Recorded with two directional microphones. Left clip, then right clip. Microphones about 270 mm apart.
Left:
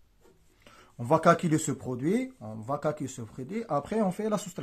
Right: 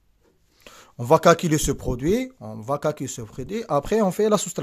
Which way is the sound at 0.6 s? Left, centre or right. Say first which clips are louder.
Right 9 dB; right.